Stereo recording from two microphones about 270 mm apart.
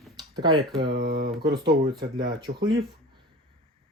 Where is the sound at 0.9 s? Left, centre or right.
Right.